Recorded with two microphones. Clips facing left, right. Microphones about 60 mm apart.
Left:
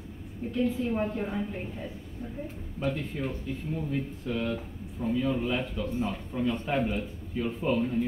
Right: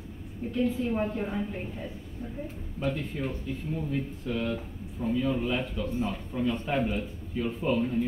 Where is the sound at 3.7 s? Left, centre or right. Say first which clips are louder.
Even; left.